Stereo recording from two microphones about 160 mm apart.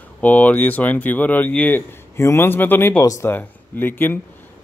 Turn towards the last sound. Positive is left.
turn(degrees=15)  # may be behind; listen again after turning